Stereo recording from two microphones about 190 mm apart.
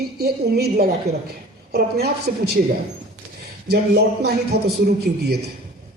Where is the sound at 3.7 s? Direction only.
55° right (ahead or behind).